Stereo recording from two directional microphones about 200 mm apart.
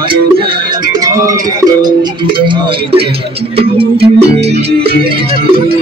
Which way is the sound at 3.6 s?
30° right (ahead or behind).